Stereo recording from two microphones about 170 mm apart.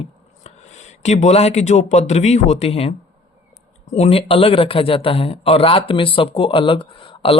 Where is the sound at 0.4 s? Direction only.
40° left (ahead or behind).